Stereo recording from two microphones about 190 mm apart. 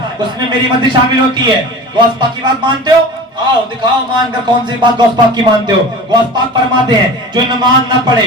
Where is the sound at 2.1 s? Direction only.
25° right (ahead or behind).